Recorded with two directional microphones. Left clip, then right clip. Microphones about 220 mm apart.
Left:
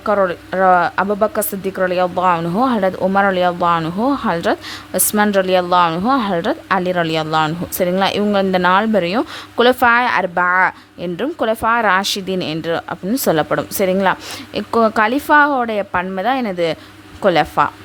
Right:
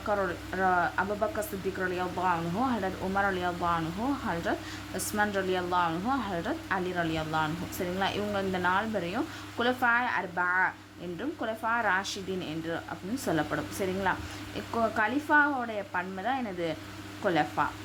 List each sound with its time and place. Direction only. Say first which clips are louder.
0.0 s a woman's voice: left 14 dB; 45° left (ahead or behind)